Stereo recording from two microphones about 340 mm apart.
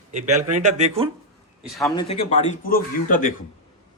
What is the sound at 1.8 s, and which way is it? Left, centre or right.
A man's voice, centre.